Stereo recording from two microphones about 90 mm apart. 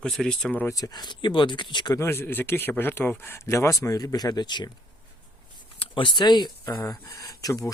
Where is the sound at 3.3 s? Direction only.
35° left (ahead or behind); by 4.7 s 55° left (ahead or behind).